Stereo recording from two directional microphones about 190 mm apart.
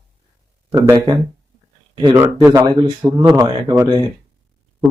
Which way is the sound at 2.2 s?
10° right (ahead or behind).